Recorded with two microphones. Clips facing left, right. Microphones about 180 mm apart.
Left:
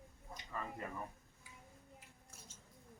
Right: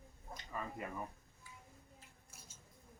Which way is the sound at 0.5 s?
10° right (ahead or behind).